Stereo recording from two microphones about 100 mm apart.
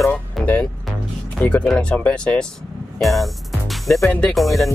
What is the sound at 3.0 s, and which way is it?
Music, centre (ahead or behind).